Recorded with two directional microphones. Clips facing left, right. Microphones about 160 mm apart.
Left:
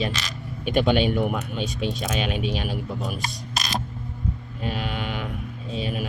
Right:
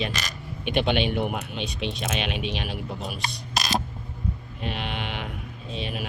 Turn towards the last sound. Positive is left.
turn(degrees=40)  # may be behind; listen again after turning